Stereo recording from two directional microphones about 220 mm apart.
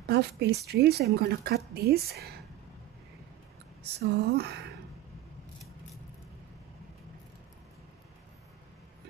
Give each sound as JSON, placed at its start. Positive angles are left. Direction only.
{"t": 0.0, "sound": "a woman's voice", "side_deg": -50}
{"t": 4.0, "sound": "a woman's voice", "side_deg": -50}